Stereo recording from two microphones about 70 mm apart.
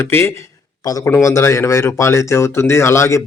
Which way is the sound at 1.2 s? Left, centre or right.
Left.